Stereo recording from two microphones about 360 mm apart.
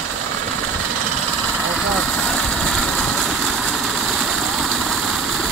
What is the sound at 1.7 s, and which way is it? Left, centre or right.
Vehicle, centre.